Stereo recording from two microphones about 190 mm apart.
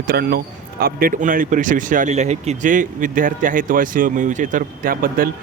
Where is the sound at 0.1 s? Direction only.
55° right (ahead or behind).